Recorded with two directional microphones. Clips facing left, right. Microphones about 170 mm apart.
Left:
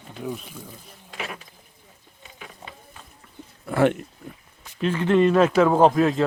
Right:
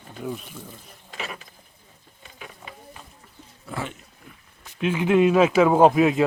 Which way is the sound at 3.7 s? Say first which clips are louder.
Left 13 dB; 65° left (ahead or behind).